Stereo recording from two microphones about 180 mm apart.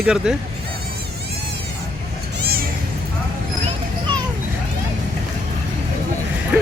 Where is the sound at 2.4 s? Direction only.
60° right (ahead or behind).